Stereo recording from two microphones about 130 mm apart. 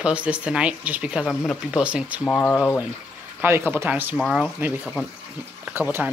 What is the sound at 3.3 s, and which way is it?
Speech, 15° right (ahead or behind).